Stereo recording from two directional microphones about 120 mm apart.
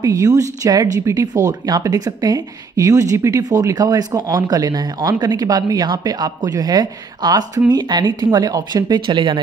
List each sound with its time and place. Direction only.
0.0 s speech: 30° right (ahead or behind)